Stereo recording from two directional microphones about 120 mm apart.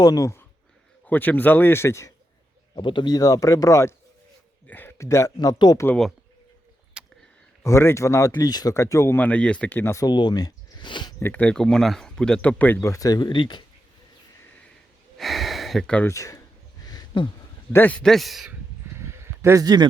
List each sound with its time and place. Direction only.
0.0 s speech: 30° left (ahead or behind)
1.0 s speech: 15° left (ahead or behind)
2.7 s speech: 40° left (ahead or behind); by 3.9 s 25° left (ahead or behind)
4.6 s speech: 15° left (ahead or behind); by 5.8 s 35° left (ahead or behind)
7.0 s a sound: 10° right (ahead or behind)
7.6 s speech: 25° left (ahead or behind)
10.1 s speech: 35° left (ahead or behind)
11.2 s speech: 15° left (ahead or behind)
12.9 s speech: 30° left (ahead or behind)
15.2 s a sound: centre (ahead or behind)
16.0 s speech: 25° left (ahead or behind)
16.8 s a sound: 35° left (ahead or behind)
17.7 s a man's voice: 15° left (ahead or behind); by 18.5 s centre (ahead or behind)
18.9 s a sound: 25° right (ahead or behind)